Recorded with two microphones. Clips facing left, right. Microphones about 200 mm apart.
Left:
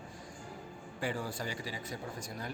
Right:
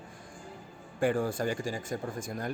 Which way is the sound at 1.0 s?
50° right (ahead or behind).